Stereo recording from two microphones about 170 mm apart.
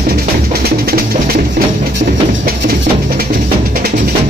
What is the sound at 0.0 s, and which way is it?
Music, 65° right (ahead or behind).